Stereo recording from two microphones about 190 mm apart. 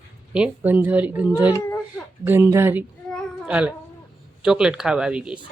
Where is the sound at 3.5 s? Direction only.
5° right (ahead or behind).